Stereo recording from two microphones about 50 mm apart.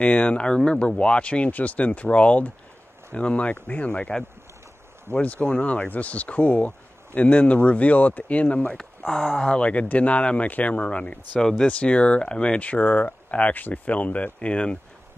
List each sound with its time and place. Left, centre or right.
0.0 s speech: left
5.1 s speech: left
9.0 s speech: centre
9.4 s speech: left